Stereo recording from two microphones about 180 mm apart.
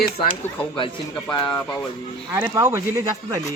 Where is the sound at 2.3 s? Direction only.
15° right (ahead or behind).